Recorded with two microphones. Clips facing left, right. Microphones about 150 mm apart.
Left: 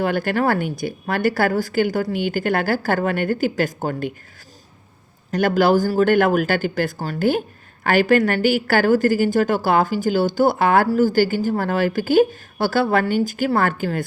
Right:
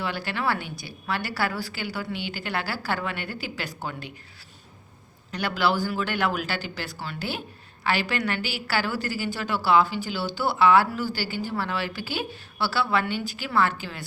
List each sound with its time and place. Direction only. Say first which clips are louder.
0.0 s a woman's voice: left 9 dB; 50° left (ahead or behind)
5.3 s a woman's voice: left 9 dB; 45° left (ahead or behind)